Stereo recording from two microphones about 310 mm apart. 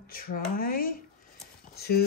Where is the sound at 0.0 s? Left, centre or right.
Left.